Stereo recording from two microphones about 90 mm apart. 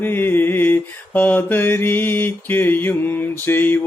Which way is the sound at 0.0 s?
20° left (ahead or behind).